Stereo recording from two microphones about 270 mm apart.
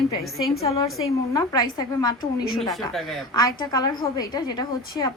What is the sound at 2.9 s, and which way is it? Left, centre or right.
Speech, centre.